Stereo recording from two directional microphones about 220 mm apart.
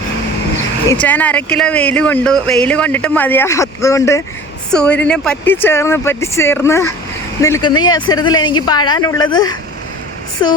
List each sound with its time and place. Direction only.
0.9 s speech: 10° left (ahead or behind)